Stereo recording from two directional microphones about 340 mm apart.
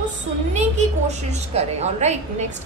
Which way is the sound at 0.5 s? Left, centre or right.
Centre.